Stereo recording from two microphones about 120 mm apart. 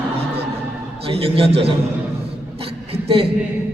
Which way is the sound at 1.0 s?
55° right (ahead or behind).